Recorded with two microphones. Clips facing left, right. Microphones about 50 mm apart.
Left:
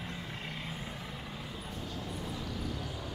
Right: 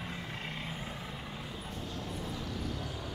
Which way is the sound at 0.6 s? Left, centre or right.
Centre.